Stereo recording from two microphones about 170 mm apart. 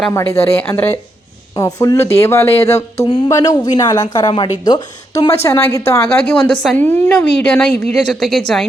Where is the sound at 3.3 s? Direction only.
20° left (ahead or behind); by 8.7 s centre (ahead or behind).